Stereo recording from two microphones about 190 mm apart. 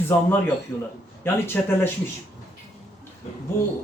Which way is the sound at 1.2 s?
10° left (ahead or behind).